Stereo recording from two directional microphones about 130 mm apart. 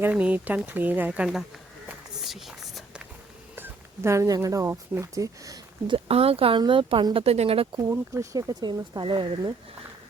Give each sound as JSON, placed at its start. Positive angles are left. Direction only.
{"t": 0.0, "sound": "speech", "side_deg": -10}
{"t": 2.2, "sound": "a sound", "side_deg": 0}
{"t": 3.5, "sound": "speech", "side_deg": -20}
{"t": 5.9, "sound": "speech", "side_deg": -50}
{"t": 7.8, "sound": "speech", "side_deg": -25}